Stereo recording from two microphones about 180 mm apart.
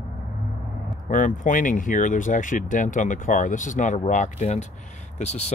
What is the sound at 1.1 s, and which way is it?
Speech, 45° left (ahead or behind).